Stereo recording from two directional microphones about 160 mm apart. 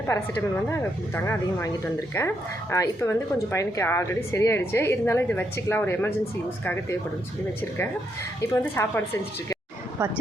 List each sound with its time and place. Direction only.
0.1 s speech: 15° left (ahead or behind)
8.4 s speech: 20° left (ahead or behind)
10.0 s speech: 10° right (ahead or behind)